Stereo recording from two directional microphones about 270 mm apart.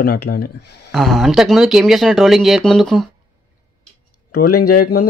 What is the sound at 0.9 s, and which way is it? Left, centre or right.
Speech, centre.